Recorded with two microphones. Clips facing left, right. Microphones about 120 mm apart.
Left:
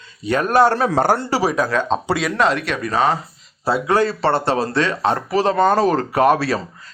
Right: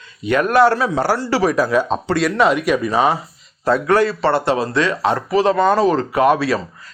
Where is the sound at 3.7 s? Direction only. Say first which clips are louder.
Right 1 dB; 25° left (ahead or behind); by 6.6 s 45° left (ahead or behind).